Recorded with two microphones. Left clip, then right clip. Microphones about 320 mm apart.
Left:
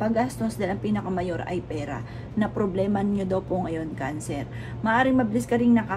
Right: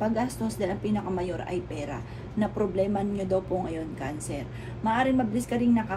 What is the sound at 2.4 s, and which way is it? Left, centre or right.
A woman's voice, left.